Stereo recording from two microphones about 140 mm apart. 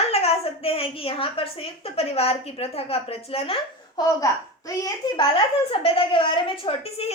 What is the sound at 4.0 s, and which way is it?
A child's voice, 25° left (ahead or behind).